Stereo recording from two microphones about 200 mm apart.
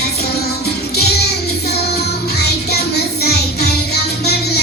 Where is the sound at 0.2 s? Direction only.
55° left (ahead or behind).